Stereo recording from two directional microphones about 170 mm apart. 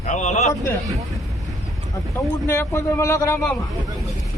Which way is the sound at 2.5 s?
15° left (ahead or behind).